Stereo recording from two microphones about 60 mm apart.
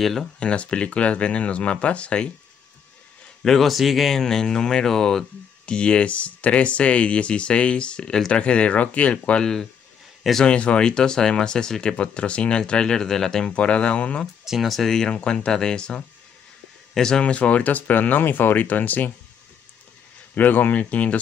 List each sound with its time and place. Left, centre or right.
0.0 s speech: centre
0.4 s speech: centre
3.4 s speech: centre
5.7 s speech: centre
14.2 s speech: centre
17.2 s speech: left
20.3 s speech: left